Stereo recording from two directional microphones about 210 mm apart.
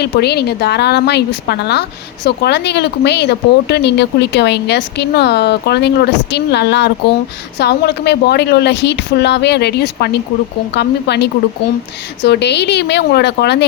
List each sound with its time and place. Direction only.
0.0 s a woman's voice: 50° left (ahead or behind)